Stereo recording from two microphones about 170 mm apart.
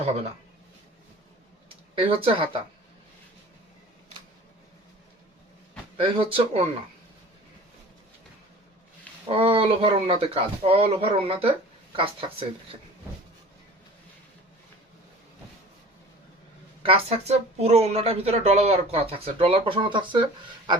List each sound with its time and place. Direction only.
2.0 s a woman's voice: 30° right (ahead or behind)
6.0 s a woman's voice: 35° right (ahead or behind)
9.2 s a woman's voice: 35° right (ahead or behind)
16.8 s a woman's voice: 35° right (ahead or behind)